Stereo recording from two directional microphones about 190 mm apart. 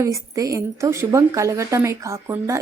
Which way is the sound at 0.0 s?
15° right (ahead or behind).